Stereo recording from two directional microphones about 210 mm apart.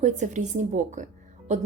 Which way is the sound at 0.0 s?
35° right (ahead or behind).